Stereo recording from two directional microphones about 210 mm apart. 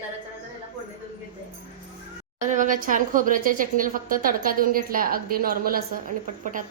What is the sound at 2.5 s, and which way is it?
A woman's voice, 40° right (ahead or behind).